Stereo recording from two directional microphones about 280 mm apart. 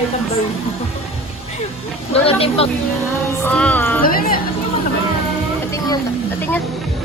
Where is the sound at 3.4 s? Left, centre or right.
Centre.